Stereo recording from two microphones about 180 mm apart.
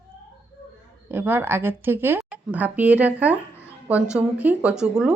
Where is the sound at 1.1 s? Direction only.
10° right (ahead or behind).